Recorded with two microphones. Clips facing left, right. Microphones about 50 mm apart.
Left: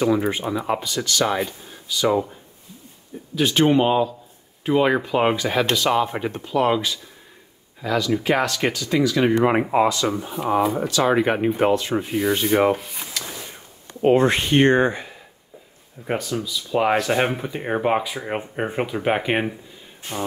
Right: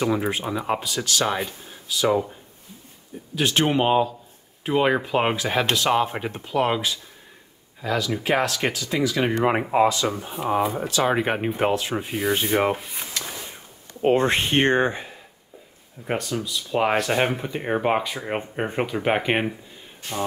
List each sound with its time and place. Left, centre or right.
0.0 s speech: centre
3.3 s speech: centre
9.4 s speech: centre
10.7 s speech: right
11.1 s speech: centre
14.2 s speech: right
16.1 s speech: centre
20.0 s speech: left